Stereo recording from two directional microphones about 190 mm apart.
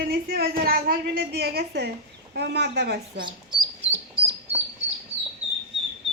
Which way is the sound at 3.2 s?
25° right (ahead or behind).